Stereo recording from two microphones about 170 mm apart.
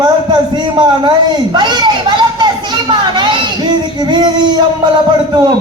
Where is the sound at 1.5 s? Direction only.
25° right (ahead or behind).